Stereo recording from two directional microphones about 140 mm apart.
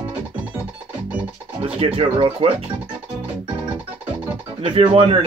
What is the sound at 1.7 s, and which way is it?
Speech, 45° right (ahead or behind).